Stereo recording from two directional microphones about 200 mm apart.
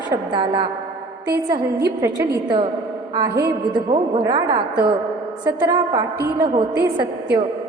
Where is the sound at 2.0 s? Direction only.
20° right (ahead or behind).